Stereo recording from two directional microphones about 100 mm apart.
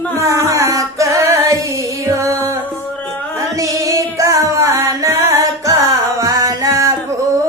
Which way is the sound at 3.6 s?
35° right (ahead or behind).